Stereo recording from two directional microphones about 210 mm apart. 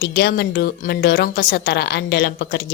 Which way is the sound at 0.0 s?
50° left (ahead or behind).